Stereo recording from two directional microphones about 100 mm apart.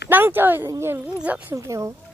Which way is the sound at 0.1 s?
20° right (ahead or behind).